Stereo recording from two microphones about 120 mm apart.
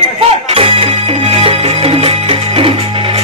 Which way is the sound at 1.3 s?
55° right (ahead or behind).